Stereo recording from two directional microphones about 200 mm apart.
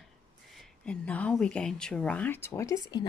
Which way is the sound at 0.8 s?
5° left (ahead or behind).